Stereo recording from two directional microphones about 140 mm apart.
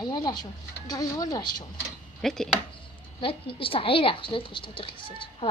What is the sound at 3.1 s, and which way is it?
Speech, 40° left (ahead or behind).